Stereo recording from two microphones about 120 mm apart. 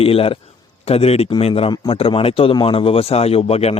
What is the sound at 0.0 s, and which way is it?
A man's voice, 50° left (ahead or behind).